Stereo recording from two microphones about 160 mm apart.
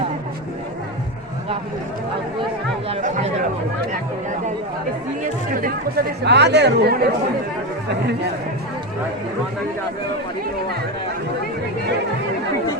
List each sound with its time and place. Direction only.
5.2 s speech: 60° right (ahead or behind); by 7.0 s 90° right